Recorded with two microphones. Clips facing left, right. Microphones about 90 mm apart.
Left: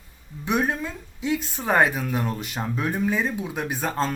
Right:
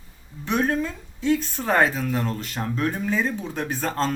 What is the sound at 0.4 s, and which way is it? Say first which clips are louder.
Speech: right 1 dB; 10° left (ahead or behind).